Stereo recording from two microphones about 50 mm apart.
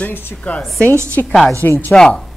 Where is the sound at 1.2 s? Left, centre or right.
Left.